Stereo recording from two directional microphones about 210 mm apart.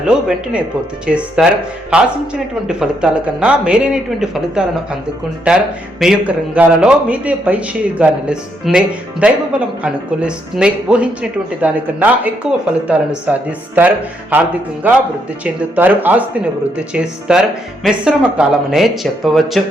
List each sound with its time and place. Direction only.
0.0 s speech: 5° right (ahead or behind)